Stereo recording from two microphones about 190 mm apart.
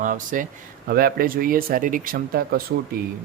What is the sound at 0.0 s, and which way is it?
Speech, 45° right (ahead or behind).